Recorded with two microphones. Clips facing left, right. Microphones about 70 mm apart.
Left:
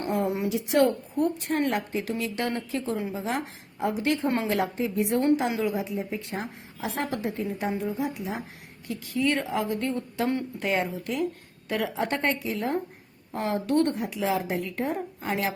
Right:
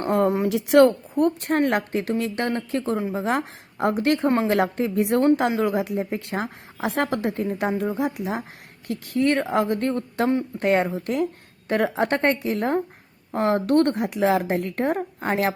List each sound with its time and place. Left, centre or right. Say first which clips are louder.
0.1 s a woman's voice: right 7 dB; right
0.5 s a woman's voice: right 7 dB; right
1.2 s a woman's voice: right 5 dB; right